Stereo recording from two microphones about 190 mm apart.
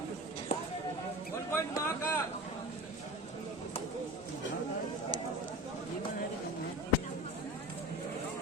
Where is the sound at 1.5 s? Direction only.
15° left (ahead or behind).